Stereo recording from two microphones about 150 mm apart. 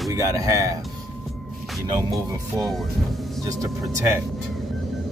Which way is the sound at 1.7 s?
Centre (ahead or behind).